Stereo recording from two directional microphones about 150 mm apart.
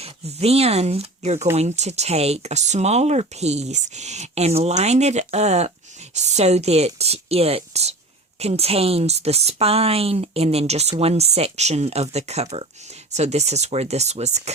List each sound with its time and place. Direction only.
0.0 s speech: 45° right (ahead or behind)